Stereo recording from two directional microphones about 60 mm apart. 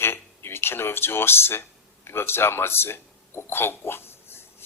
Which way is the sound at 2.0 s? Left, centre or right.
Left.